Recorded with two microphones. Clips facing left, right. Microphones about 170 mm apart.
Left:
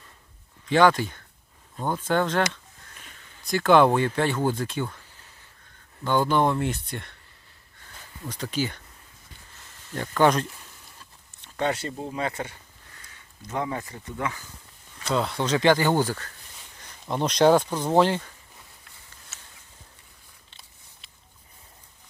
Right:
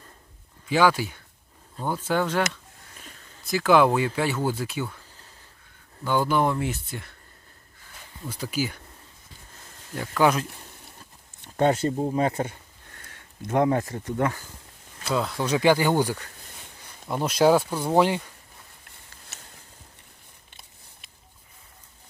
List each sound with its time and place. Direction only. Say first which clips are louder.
0.7 s speech: left 2 dB; 5° right (ahead or behind)
6.1 s speech: left 1 dB; 5° right (ahead or behind)
8.3 s speech: even; 10° right (ahead or behind)
9.9 s speech: left 1 dB; 5° right (ahead or behind)
11.4 s a sound: right 5 dB; 45° right (ahead or behind)
11.9 s speech: right 6 dB; 40° right (ahead or behind)
13.0 s speech: right 9 dB; 55° right (ahead or behind)
15.0 s speech: even; centre (ahead or behind)